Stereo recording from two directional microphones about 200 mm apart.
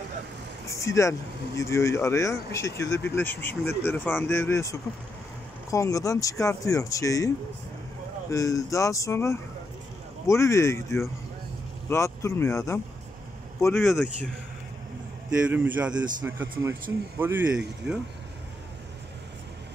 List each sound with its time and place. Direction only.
0.7 s speech: 15° left (ahead or behind)
8.3 s speech: 15° left (ahead or behind)
13.8 s speech: 5° right (ahead or behind)
15.4 s speech: 10° right (ahead or behind)